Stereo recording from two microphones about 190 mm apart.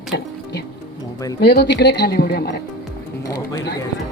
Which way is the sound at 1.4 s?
60° left (ahead or behind).